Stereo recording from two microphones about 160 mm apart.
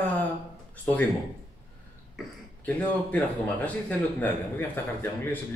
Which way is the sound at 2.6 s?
10° left (ahead or behind).